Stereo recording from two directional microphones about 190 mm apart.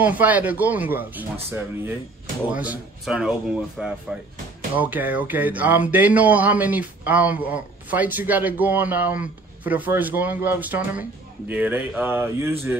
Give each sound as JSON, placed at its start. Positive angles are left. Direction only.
{"t": 0.0, "sound": "speech", "side_deg": -10}